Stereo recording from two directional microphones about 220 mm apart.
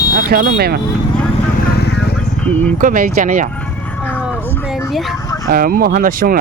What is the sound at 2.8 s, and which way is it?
Speech, 40° right (ahead or behind).